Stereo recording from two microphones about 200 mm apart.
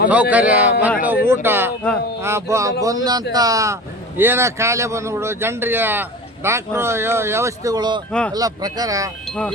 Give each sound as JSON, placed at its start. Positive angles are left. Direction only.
{"t": 0.1, "sound": "speech", "side_deg": -5}